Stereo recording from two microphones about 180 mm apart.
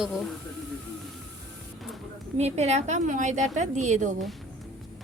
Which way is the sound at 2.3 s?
35° right (ahead or behind).